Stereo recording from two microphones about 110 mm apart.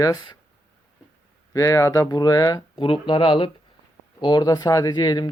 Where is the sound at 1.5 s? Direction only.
30° left (ahead or behind).